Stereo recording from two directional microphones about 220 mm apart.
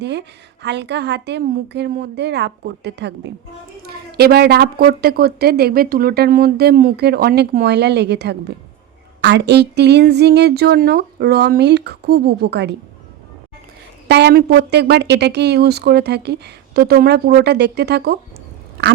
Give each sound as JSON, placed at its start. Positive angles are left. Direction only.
{"t": 0.0, "sound": "a woman's voice", "side_deg": -50}
{"t": 14.1, "sound": "a woman's voice", "side_deg": -50}